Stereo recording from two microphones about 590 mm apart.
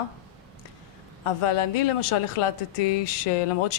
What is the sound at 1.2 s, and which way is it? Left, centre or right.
Speech, left.